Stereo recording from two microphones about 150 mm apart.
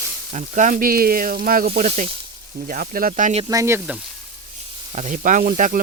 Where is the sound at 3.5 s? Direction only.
20° right (ahead or behind).